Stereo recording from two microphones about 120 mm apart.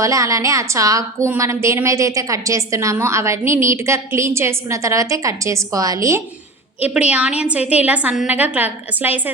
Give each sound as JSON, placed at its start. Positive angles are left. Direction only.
{"t": 0.0, "sound": "a woman's voice", "side_deg": -25}
{"t": 6.8, "sound": "a woman's voice", "side_deg": -10}